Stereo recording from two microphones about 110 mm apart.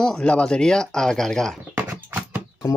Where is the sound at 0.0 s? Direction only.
10° left (ahead or behind).